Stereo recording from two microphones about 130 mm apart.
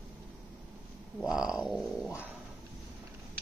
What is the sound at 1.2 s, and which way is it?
Speech, 5° right (ahead or behind).